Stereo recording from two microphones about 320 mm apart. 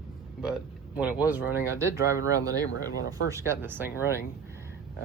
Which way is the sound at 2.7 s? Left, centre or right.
Left.